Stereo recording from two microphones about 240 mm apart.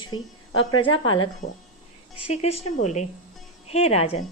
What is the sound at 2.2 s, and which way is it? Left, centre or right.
Speech, left.